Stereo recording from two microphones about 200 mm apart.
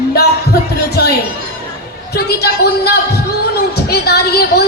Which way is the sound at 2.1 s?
50° left (ahead or behind).